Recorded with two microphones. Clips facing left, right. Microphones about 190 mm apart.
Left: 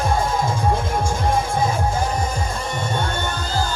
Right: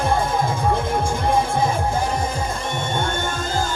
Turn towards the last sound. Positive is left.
turn(degrees=-50)  # may be behind; listen again after turning